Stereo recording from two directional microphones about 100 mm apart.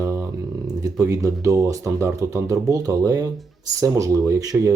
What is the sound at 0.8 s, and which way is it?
Speech, 40° right (ahead or behind).